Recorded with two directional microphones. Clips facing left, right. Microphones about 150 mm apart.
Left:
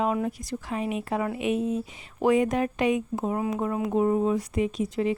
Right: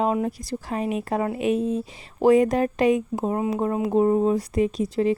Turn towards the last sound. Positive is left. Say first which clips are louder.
# right 4 dB
turn(degrees=-35)  # may be behind; listen again after turning